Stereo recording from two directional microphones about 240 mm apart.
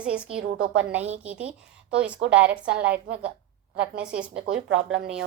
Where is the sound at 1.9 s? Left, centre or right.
Centre.